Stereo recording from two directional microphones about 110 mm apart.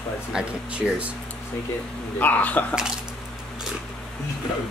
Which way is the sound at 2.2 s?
15° left (ahead or behind).